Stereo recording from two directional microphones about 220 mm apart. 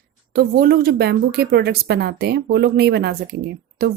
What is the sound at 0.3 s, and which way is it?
A woman's voice, 45° right (ahead or behind).